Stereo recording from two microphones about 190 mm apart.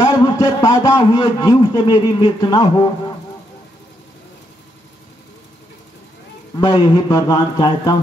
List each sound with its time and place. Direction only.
0.0 s a man's voice: 20° left (ahead or behind)
6.6 s a man's voice: 20° left (ahead or behind)